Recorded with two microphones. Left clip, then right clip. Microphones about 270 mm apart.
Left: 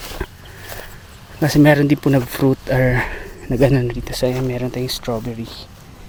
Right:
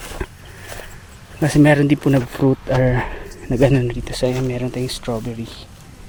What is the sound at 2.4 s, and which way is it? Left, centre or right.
Speech, left.